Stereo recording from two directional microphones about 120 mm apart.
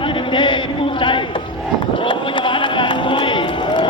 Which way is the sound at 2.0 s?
45° left (ahead or behind).